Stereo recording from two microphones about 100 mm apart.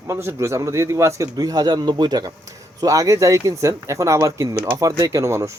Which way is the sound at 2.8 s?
35° right (ahead or behind).